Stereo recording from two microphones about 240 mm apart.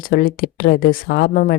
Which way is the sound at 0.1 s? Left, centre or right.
Left.